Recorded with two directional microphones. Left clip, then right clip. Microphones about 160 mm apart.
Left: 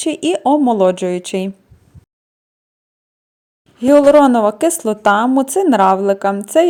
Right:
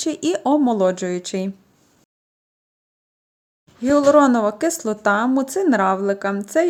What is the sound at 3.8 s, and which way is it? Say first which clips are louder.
Speech: left 6 dB; 15° left (ahead or behind).